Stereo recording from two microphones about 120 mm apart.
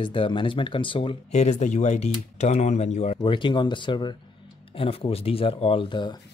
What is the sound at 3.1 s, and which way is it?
Speech, 45° left (ahead or behind).